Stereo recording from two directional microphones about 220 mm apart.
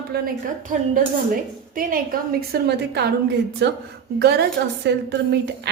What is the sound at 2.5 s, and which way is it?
A woman's voice, 50° right (ahead or behind).